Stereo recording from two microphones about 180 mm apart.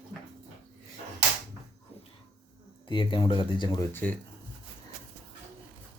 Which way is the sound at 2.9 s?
25° left (ahead or behind).